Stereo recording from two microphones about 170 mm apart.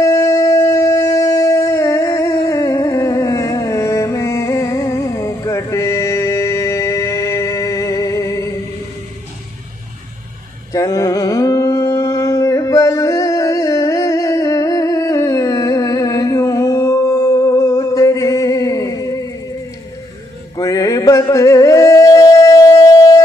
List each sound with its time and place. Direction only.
0.0 s howl: 20° left (ahead or behind)
10.7 s a sound: 20° left (ahead or behind)
20.5 s music: 20° left (ahead or behind)